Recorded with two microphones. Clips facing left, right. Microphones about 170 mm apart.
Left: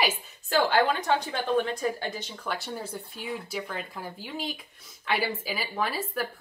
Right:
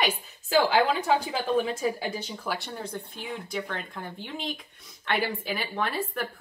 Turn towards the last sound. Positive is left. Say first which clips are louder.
# even
turn(degrees=5)  # may be behind; listen again after turning